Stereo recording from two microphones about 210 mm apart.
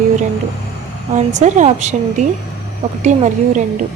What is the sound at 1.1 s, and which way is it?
Speech, 35° right (ahead or behind).